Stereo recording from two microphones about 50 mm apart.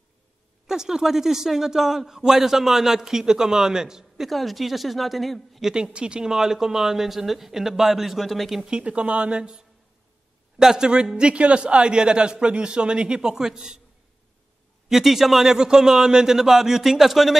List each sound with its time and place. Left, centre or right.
0.7 s a man's voice: centre
4.3 s speech: centre
5.9 s a man's voice: centre
8.6 s a man's voice: centre
14.9 s a man's voice: centre